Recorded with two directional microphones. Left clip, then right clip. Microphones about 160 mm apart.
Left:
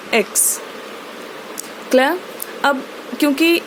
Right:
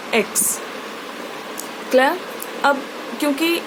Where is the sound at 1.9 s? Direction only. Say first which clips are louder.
Left 1 dB; 45° left (ahead or behind).